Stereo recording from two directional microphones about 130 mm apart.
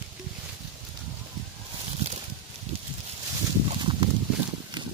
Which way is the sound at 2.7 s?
55° right (ahead or behind).